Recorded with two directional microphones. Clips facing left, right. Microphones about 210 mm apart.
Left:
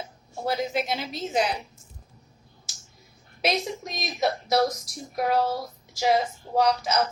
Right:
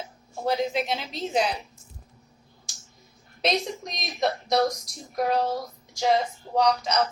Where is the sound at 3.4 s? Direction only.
5° left (ahead or behind).